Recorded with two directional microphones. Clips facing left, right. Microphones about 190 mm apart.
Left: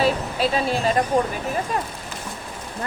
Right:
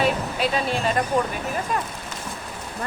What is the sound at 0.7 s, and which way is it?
Speech, 35° left (ahead or behind).